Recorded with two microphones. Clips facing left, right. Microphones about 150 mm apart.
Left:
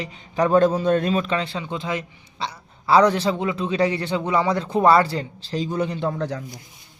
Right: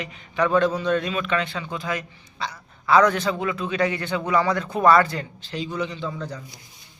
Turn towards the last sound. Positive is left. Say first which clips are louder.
# left 6 dB
turn(degrees=70)  # may be behind; listen again after turning